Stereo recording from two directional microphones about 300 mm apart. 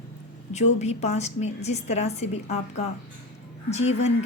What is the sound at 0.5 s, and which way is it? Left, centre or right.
A woman's voice, left.